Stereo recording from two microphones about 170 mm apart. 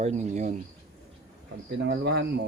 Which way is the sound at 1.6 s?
90° right.